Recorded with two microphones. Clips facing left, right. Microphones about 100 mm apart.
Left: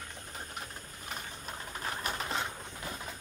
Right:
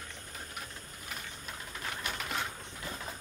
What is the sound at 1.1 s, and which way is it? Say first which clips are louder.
Vehicle: left 2 dB; 35° left (ahead or behind).